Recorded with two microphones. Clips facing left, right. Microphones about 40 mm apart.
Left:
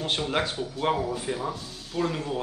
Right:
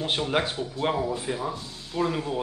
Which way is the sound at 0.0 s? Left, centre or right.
Centre.